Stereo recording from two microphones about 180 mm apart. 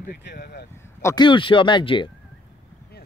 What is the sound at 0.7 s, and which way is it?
Speech, 15° left (ahead or behind).